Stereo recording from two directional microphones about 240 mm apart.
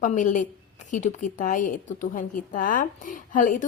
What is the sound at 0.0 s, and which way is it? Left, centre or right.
A woman's voice, left.